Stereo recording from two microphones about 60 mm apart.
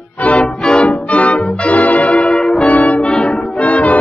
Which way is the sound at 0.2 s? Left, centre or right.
Centre.